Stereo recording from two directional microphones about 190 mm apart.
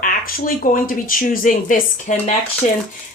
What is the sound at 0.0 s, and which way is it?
Speech, 45° left (ahead or behind).